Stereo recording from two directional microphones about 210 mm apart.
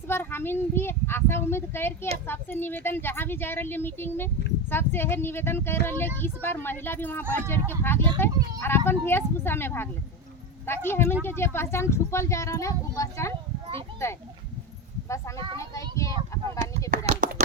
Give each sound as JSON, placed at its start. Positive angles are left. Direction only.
{"t": 0.1, "sound": "speech", "side_deg": 10}
{"t": 15.5, "sound": "child singing", "side_deg": 15}
{"t": 17.1, "sound": "a sound", "side_deg": -30}